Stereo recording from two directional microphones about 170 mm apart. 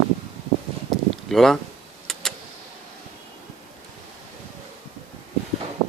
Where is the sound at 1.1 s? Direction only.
Centre (ahead or behind).